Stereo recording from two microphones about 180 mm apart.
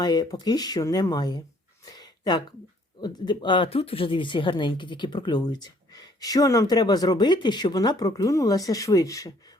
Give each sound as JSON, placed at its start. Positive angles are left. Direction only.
{"t": 0.0, "sound": "speech", "side_deg": 20}
{"t": 1.8, "sound": "a sound", "side_deg": 20}
{"t": 3.0, "sound": "speech", "side_deg": 25}